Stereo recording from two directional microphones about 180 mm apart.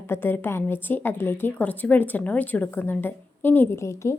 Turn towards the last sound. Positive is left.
turn(degrees=15)  # may be behind; listen again after turning